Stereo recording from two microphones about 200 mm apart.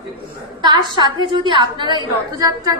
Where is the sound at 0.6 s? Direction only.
20° right (ahead or behind).